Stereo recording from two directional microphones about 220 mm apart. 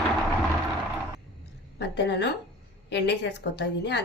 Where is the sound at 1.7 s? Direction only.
50° left (ahead or behind).